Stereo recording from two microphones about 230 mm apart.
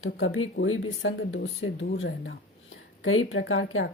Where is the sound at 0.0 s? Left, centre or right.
Left.